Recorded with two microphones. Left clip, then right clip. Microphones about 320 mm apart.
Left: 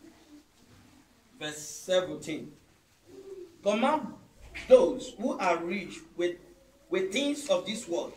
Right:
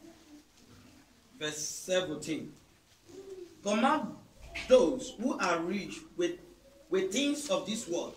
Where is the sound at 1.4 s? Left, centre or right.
Centre.